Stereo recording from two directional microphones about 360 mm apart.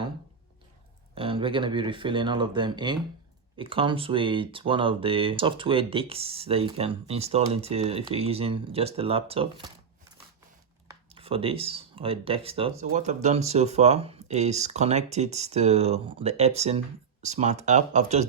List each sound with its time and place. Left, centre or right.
1.1 s speech: centre
10.8 s speech: centre